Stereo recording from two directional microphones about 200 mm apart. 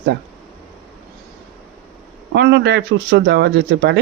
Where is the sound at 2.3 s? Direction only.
60° right (ahead or behind).